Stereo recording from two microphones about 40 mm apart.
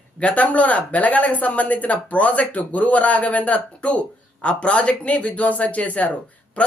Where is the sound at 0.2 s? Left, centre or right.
Left.